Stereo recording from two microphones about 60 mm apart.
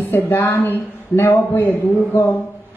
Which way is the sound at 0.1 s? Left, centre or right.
Left.